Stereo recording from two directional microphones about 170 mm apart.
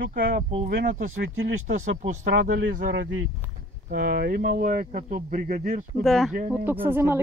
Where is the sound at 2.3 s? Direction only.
60° right (ahead or behind).